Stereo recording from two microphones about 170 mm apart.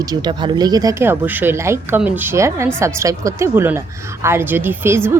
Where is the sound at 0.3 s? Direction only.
25° right (ahead or behind).